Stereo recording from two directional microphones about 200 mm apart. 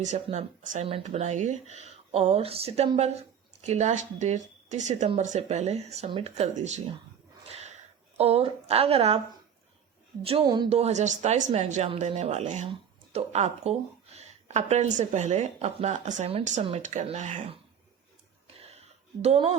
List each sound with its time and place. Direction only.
0.0 s a woman's voice: 35° right (ahead or behind)
7.4 s a sound: 35° right (ahead or behind)
8.2 s a woman's voice: 30° right (ahead or behind)
10.2 s a woman's voice: 25° right (ahead or behind)
18.4 s a sound: 30° right (ahead or behind)
19.2 s a woman's voice: 30° right (ahead or behind)